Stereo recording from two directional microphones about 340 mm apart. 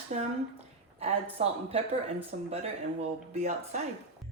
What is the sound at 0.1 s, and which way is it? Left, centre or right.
Speech, right.